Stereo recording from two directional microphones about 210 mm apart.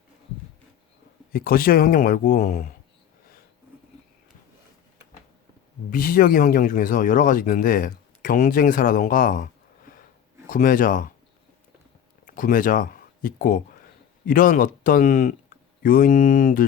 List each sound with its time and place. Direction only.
1.3 s speech: 45° left (ahead or behind)
5.9 s speech: 45° left (ahead or behind)
12.2 s speech: 40° left (ahead or behind)